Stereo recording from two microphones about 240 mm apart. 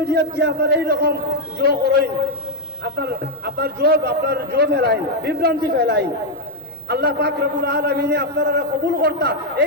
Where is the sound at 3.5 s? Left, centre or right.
Right.